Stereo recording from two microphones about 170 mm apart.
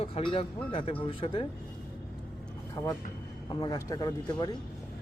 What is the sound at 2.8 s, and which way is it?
Speech, 20° left (ahead or behind).